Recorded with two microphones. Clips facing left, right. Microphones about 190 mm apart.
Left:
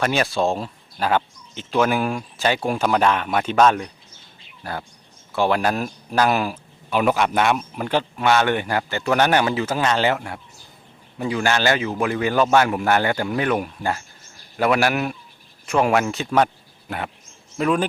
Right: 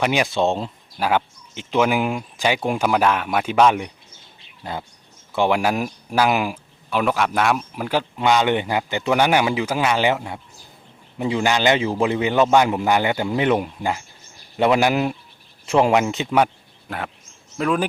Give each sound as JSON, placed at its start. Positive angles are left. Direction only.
{"t": 0.0, "sound": "a man's voice", "side_deg": -15}
{"t": 0.9, "sound": "a man's voice", "side_deg": -10}
{"t": 6.9, "sound": "speech", "side_deg": 0}
{"t": 8.1, "sound": "a man's voice", "side_deg": -15}
{"t": 17.6, "sound": "speech", "side_deg": 0}